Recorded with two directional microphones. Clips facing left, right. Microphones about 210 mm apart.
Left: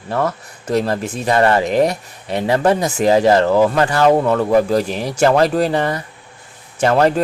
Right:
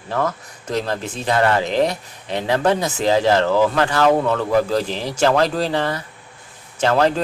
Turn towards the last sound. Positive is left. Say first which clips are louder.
# left 3 dB
turn(degrees=10)  # may be behind; listen again after turning